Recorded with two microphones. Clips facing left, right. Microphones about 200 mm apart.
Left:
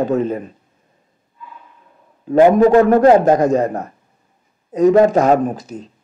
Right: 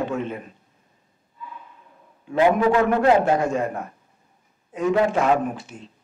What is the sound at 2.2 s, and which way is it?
A man's voice, 45° left (ahead or behind).